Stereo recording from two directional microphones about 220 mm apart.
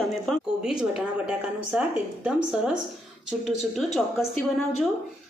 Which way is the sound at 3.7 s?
Centre (ahead or behind).